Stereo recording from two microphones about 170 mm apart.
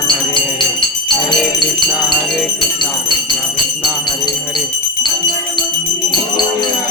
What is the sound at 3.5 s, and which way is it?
Music, 25° left (ahead or behind).